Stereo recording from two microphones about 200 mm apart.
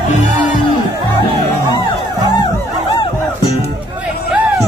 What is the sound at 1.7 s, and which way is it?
Music, 20° left (ahead or behind).